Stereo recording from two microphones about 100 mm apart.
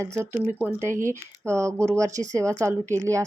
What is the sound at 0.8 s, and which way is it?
A woman's voice, 25° right (ahead or behind).